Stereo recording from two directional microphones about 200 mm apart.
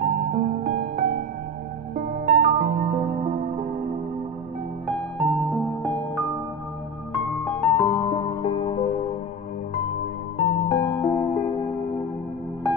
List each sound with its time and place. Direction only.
0.3 s music: 40° right (ahead or behind)
2.0 s music: 30° right (ahead or behind)
4.8 s music: centre (ahead or behind)
7.2 s music: 10° left (ahead or behind)
8.4 s music: 25° left (ahead or behind)
10.3 s music: 25° left (ahead or behind)